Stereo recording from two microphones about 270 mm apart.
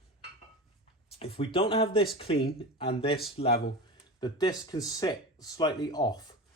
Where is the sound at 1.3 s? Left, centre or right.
Centre.